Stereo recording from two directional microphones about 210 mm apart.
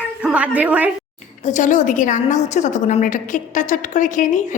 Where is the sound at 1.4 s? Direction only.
35° left (ahead or behind).